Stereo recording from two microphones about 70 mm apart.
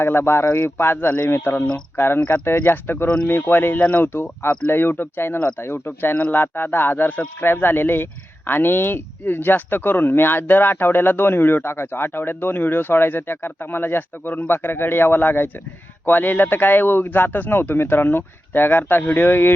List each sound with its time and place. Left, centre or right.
0.0 s speech: left